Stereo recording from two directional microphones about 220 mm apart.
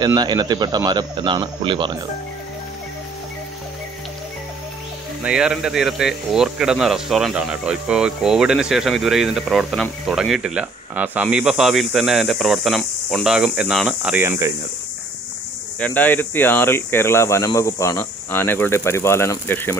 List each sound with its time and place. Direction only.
0.0 s speech: 20° right (ahead or behind)
5.2 s speech: 5° right (ahead or behind)
15.8 s speech: 10° left (ahead or behind)